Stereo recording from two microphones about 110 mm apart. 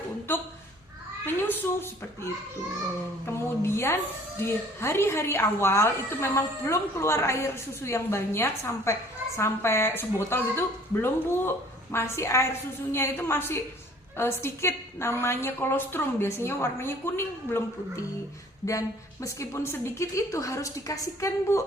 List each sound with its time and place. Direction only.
0.3 s a woman's voice: 20° left (ahead or behind)